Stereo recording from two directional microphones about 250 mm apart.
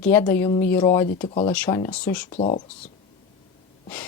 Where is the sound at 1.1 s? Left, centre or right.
Left.